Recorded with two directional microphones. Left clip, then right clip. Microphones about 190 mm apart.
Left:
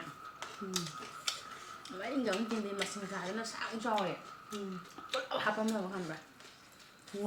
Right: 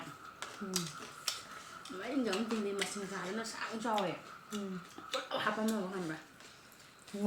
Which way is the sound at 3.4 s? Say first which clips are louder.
Left 1 dB; 15° left (ahead or behind).